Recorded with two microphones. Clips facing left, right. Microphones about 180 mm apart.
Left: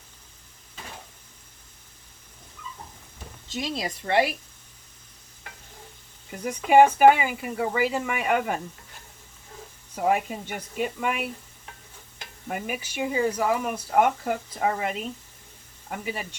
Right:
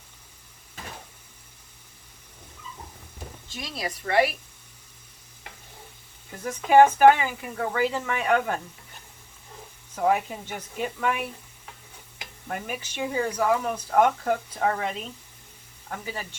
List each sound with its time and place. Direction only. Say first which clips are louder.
3.8 s speech: even; 25° left (ahead or behind)
6.4 s speech: even; 15° left (ahead or behind)
9.9 s speech: even; 10° left (ahead or behind)
12.5 s speech: left 2 dB; 10° left (ahead or behind)